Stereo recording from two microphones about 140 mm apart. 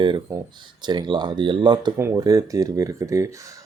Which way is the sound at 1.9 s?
20° right (ahead or behind).